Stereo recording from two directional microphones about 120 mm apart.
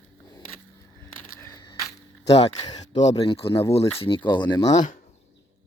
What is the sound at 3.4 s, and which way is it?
Speech, 50° left (ahead or behind).